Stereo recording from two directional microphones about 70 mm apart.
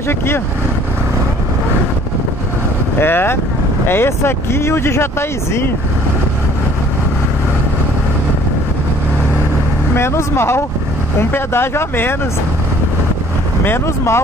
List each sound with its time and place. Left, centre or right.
3.0 s speech: left
9.9 s speech: left
13.7 s speech: left